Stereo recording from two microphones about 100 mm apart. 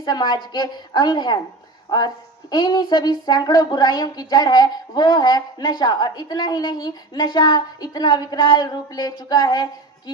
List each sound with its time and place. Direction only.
0.0 s a woman's voice: 45° left (ahead or behind)